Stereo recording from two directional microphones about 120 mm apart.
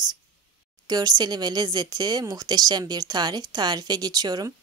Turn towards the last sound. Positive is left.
turn(degrees=-35)  # may be behind; listen again after turning